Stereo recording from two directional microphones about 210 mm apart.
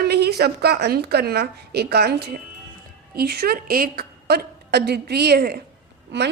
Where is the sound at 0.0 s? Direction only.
50° right (ahead or behind).